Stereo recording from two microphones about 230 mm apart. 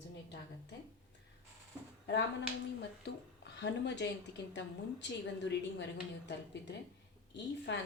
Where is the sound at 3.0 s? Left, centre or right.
Left.